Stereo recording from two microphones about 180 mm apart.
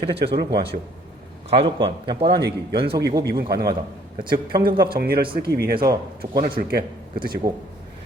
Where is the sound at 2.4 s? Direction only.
65° right (ahead or behind).